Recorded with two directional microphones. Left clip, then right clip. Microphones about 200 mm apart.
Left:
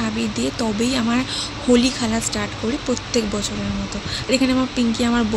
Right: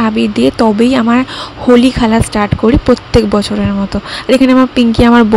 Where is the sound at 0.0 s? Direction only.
45° right (ahead or behind).